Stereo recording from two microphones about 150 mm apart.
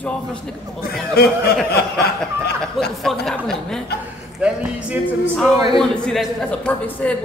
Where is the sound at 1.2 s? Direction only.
90° left.